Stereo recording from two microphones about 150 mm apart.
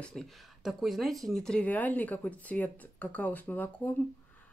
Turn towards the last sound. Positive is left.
turn(degrees=10)  # may be behind; listen again after turning